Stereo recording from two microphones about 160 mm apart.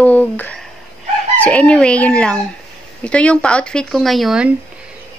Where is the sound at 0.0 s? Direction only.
10° left (ahead or behind).